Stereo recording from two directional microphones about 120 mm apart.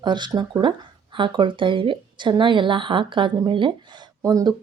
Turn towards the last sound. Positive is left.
turn(degrees=-30)  # may be behind; listen again after turning